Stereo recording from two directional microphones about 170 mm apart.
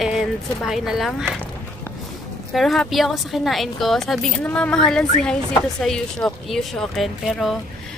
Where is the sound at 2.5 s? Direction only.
Centre (ahead or behind).